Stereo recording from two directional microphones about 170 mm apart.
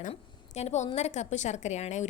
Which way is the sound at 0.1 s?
40° left (ahead or behind).